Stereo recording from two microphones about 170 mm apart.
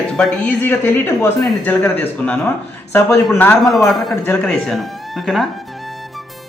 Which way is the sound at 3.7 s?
Centre (ahead or behind).